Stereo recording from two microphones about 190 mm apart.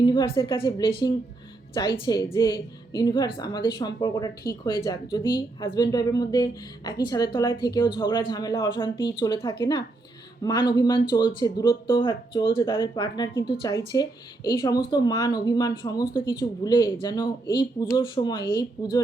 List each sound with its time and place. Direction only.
0.0 s a woman's voice: 25° left (ahead or behind)